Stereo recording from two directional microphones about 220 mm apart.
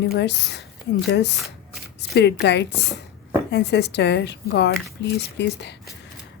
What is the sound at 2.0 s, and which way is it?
A woman's voice, 50° left (ahead or behind).